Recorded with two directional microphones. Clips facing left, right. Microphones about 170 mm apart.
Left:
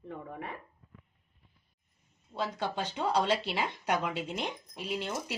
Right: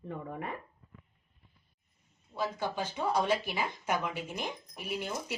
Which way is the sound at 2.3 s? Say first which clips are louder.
Even; 65° left (ahead or behind).